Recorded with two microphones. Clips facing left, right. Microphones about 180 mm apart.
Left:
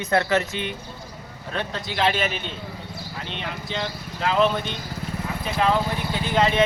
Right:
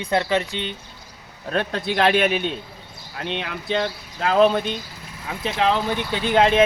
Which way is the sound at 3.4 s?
60° right (ahead or behind).